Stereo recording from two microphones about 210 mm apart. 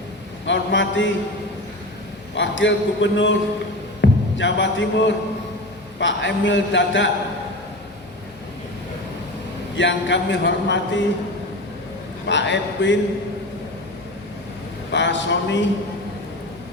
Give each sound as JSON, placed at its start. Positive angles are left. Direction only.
{"t": 0.4, "sound": "a man's voice", "side_deg": 60}
{"t": 2.3, "sound": "a man's voice", "side_deg": 60}
{"t": 9.7, "sound": "a man's voice", "side_deg": 60}
{"t": 12.3, "sound": "a man's voice", "side_deg": 60}
{"t": 14.9, "sound": "a man's voice", "side_deg": 60}